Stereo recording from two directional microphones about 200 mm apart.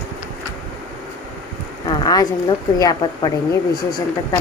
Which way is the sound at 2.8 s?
20° left (ahead or behind).